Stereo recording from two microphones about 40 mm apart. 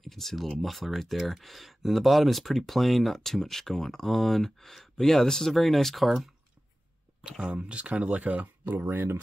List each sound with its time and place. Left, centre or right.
0.0 s speech: centre
7.2 s speech: right
7.5 s speech: right
8.6 s speech: right